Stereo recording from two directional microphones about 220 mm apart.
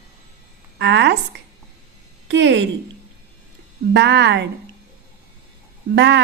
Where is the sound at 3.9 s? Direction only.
50° right (ahead or behind).